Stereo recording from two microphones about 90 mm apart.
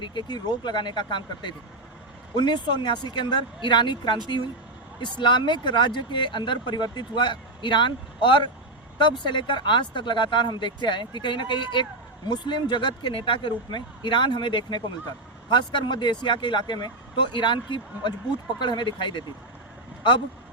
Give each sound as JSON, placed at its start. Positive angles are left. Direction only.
{"t": 0.0, "sound": "speech", "side_deg": 60}